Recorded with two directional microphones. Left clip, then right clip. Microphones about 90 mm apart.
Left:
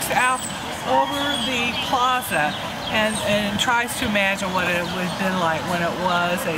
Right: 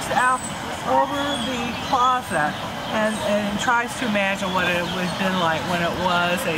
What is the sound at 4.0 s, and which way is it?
Speech, 20° left (ahead or behind).